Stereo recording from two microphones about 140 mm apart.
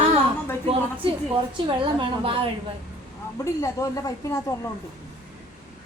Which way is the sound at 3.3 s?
20° left (ahead or behind).